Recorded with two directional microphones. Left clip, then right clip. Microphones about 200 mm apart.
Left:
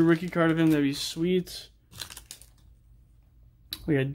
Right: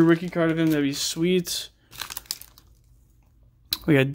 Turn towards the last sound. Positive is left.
turn(degrees=-30)  # may be behind; listen again after turning